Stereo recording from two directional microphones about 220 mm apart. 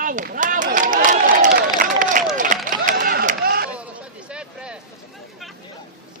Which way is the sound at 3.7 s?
5° right (ahead or behind).